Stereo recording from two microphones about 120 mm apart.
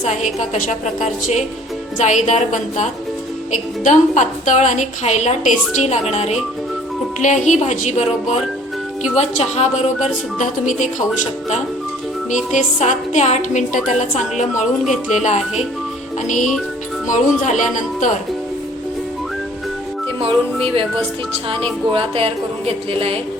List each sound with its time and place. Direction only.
0.0 s a woman's voice: 75° left (ahead or behind)
3.8 s a woman's voice: 90° left; by 6.3 s 65° left (ahead or behind)
7.2 s a woman's voice: 90° left
9.1 s speech: 65° left (ahead or behind); by 10.8 s 90° left
12.5 s a woman's voice: 80° left
21.5 s a woman's voice: 50° right (ahead or behind)